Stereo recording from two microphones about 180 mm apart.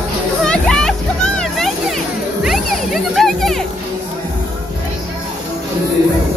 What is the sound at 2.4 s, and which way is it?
Music, centre (ahead or behind).